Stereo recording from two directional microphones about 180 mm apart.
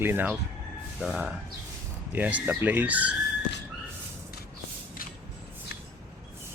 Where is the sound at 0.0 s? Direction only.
10° right (ahead or behind).